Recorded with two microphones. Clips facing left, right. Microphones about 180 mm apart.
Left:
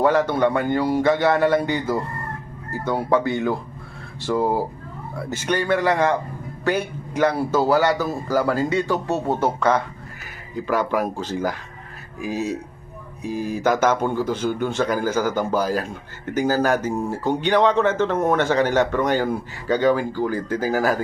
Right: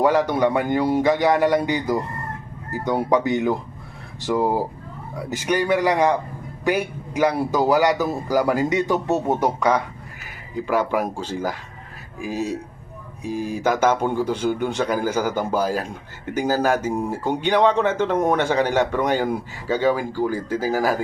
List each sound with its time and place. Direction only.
0.0 s speech: 15° right (ahead or behind)
12.2 s speech: 50° right (ahead or behind)
13.5 s speech: 10° right (ahead or behind)